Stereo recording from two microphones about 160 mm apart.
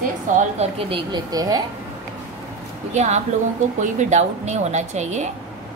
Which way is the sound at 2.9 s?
45° right (ahead or behind).